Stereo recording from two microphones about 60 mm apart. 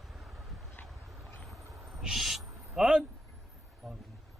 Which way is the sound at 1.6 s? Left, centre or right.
Right.